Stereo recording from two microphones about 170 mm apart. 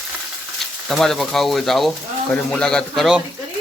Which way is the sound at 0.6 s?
Centre (ahead or behind).